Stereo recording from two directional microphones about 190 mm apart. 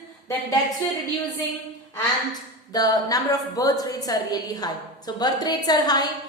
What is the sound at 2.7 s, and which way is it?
A woman's voice, 20° left (ahead or behind).